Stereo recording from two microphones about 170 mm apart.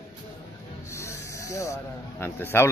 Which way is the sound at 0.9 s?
15° left (ahead or behind).